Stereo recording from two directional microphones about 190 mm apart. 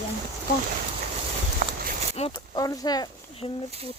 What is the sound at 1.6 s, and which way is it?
Clip-clop, 50° right (ahead or behind).